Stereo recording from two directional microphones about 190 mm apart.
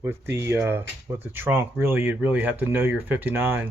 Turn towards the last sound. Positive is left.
turn(degrees=-10)  # may be behind; listen again after turning